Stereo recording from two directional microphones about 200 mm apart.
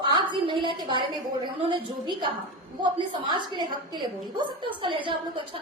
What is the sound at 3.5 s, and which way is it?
A woman's voice, 20° right (ahead or behind).